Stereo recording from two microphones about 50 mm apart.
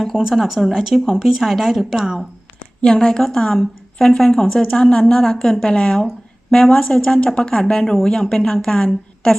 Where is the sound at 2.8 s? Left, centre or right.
Centre.